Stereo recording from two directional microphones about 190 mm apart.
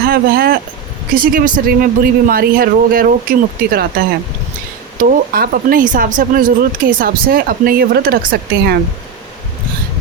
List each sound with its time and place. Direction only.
0.0 s speech: 50° right (ahead or behind)